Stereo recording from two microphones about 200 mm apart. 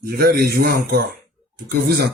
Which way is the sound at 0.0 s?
50° right (ahead or behind).